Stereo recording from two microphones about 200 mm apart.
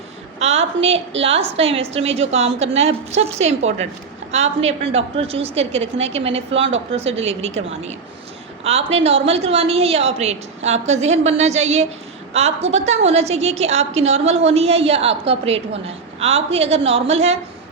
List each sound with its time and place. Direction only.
0.3 s a woman's voice: 30° right (ahead or behind)
8.6 s a woman's voice: 30° right (ahead or behind)